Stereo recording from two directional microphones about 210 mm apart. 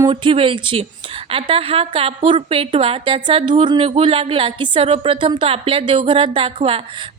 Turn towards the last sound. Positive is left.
turn(degrees=-25)  # may be behind; listen again after turning